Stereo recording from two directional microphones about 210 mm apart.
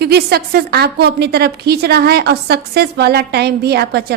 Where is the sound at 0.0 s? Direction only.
50° right (ahead or behind).